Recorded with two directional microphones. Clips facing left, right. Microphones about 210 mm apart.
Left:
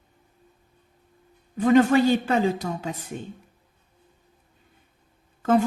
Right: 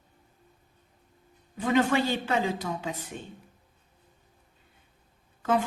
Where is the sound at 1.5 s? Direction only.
45° left (ahead or behind).